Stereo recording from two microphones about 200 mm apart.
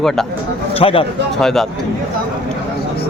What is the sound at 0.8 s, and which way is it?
Speech, 25° left (ahead or behind).